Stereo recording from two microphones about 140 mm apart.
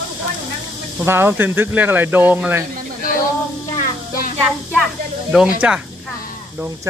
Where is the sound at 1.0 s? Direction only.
15° right (ahead or behind).